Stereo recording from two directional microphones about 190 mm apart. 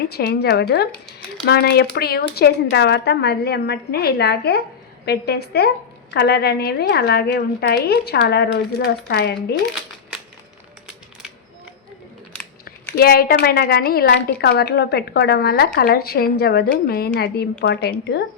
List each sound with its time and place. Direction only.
0.0 s a woman's voice: 55° left (ahead or behind)
13.0 s a woman's voice: 55° left (ahead or behind)